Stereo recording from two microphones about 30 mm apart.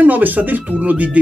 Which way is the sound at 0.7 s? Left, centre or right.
Right.